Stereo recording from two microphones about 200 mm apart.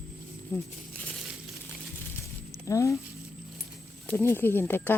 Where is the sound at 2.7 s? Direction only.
15° left (ahead or behind).